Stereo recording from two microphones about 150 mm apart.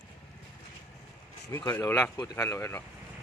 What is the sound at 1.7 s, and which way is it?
A man's voice, 15° left (ahead or behind).